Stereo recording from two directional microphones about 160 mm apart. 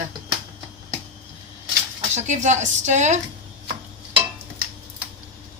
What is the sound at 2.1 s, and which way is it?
A woman's voice, 50° right (ahead or behind).